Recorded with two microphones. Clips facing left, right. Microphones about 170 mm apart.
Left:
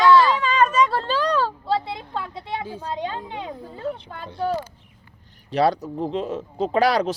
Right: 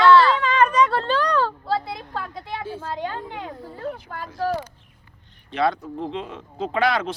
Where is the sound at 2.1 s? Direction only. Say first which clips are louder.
Left 2 dB; 25° left (ahead or behind).